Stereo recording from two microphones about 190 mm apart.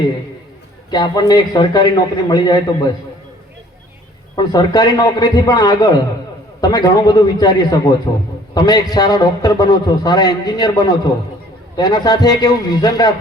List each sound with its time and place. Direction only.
0.9 s a man's voice: 20° left (ahead or behind)
4.4 s a man's voice: 20° left (ahead or behind)